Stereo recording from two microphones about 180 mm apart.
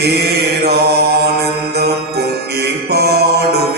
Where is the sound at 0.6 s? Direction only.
65° right (ahead or behind).